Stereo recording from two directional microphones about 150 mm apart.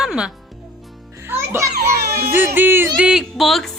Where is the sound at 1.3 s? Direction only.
20° right (ahead or behind).